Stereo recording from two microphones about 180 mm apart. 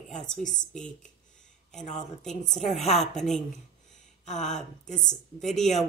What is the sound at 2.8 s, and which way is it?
Speech, 35° left (ahead or behind).